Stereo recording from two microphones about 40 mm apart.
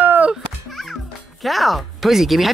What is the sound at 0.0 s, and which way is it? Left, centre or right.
Music, right.